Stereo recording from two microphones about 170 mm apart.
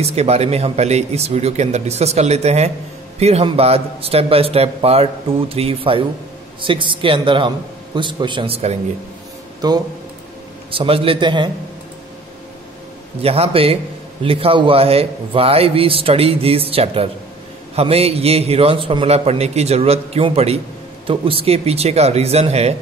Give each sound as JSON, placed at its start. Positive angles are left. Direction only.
{"t": 0.0, "sound": "a man's voice", "side_deg": -40}
{"t": 9.6, "sound": "a man's voice", "side_deg": -25}
{"t": 13.2, "sound": "a man's voice", "side_deg": -35}